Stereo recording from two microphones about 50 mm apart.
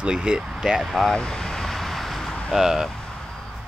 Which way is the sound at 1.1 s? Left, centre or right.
Centre.